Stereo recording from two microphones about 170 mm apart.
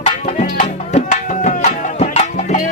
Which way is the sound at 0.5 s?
45° left (ahead or behind).